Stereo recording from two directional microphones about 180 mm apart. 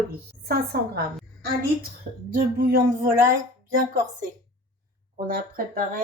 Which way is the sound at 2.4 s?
55° right (ahead or behind).